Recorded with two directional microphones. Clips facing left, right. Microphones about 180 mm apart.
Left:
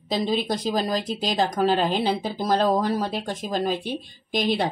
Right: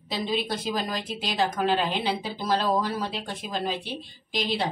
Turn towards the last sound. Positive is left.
turn(degrees=50)  # may be behind; listen again after turning